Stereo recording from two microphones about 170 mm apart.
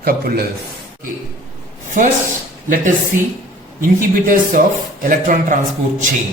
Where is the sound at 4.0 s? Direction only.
55° right (ahead or behind).